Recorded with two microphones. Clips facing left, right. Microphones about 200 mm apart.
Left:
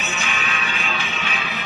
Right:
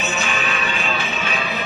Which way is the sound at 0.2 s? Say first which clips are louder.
Right 4 dB; 40° right (ahead or behind).